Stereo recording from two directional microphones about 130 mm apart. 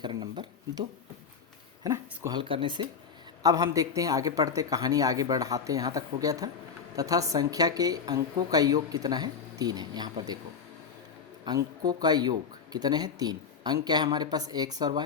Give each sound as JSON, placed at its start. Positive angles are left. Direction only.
{"t": 0.0, "sound": "a sound", "side_deg": -35}
{"t": 1.8, "sound": "speech", "side_deg": -25}
{"t": 2.4, "sound": "speech", "side_deg": -40}
{"t": 3.4, "sound": "a woman's voice", "side_deg": -25}
{"t": 11.4, "sound": "speech", "side_deg": -30}